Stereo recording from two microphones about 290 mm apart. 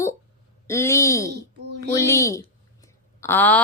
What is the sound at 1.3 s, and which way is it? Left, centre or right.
Speech, right.